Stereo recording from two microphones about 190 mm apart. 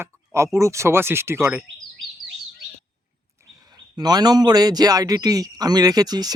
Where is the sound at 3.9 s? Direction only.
20° right (ahead or behind).